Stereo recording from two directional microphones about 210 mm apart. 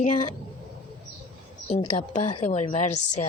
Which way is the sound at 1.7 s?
25° left (ahead or behind).